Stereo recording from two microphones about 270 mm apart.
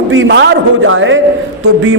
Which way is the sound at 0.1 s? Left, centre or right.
Right.